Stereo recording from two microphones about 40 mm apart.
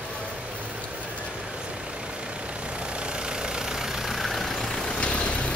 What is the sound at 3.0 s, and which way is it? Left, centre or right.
Vehicle, right.